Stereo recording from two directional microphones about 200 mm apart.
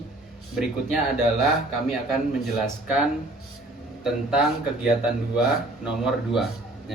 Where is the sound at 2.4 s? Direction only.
5° right (ahead or behind).